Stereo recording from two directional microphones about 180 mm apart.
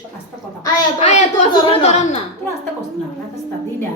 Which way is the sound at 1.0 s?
40° left (ahead or behind).